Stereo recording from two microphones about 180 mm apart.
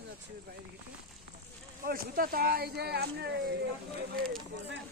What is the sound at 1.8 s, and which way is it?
Speech, 55° right (ahead or behind).